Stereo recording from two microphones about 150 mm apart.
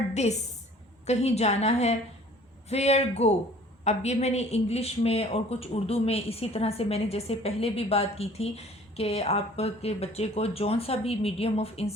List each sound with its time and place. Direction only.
0.1 s a woman's voice: 50° left (ahead or behind)